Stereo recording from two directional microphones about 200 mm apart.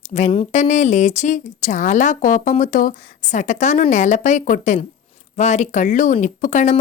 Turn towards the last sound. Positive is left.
turn(degrees=40)  # may be behind; listen again after turning